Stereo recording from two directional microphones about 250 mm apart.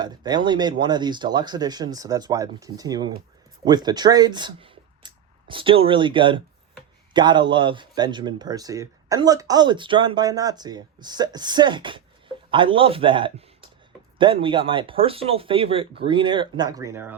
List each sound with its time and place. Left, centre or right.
0.0 s a man's voice: centre